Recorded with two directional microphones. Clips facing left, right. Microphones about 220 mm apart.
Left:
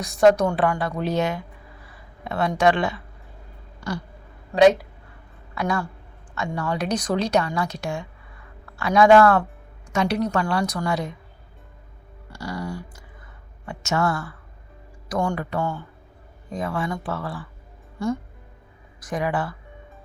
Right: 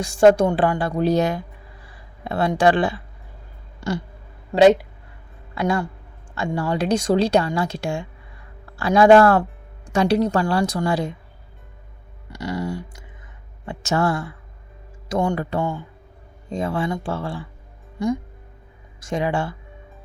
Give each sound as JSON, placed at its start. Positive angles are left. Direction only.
{"t": 0.0, "sound": "a woman's voice", "side_deg": -30}
{"t": 3.8, "sound": "a sound", "side_deg": -25}
{"t": 5.5, "sound": "a woman's voice", "side_deg": -25}
{"t": 12.3, "sound": "a woman's voice", "side_deg": -20}